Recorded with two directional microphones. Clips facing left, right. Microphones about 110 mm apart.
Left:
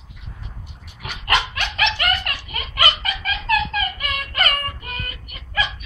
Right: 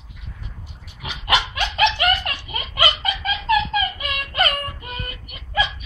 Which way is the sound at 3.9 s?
20° right (ahead or behind).